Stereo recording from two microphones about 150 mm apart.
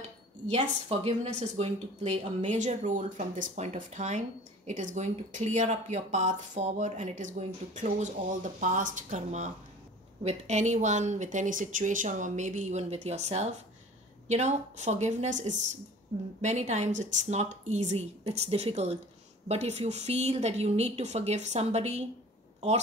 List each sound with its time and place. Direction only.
0.6 s speech: 45° right (ahead or behind)